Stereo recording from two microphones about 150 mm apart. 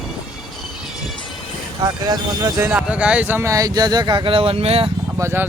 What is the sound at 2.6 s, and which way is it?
Speech, 10° right (ahead or behind).